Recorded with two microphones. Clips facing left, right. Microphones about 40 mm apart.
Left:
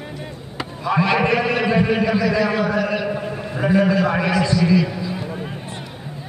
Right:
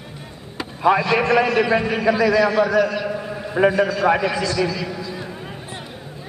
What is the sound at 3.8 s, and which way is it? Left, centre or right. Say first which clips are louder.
Speech: left 3 dB; centre.